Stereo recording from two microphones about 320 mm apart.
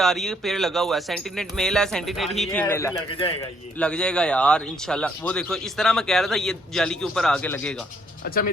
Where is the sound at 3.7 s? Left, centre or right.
Centre.